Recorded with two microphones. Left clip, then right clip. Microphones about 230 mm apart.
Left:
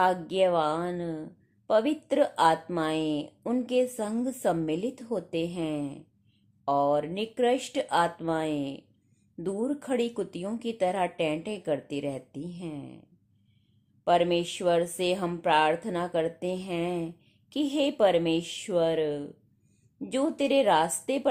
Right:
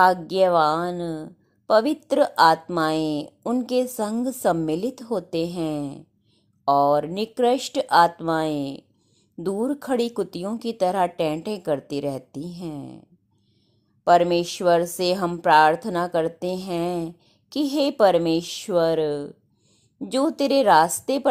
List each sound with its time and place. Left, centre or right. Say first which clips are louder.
0.0 s a woman's voice: right 7 dB; right
14.0 s a woman's voice: right 7 dB; right